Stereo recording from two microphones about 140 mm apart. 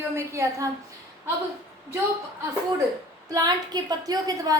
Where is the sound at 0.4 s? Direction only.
20° right (ahead or behind).